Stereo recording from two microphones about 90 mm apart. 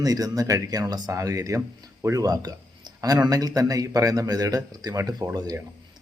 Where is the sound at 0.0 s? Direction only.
40° right (ahead or behind).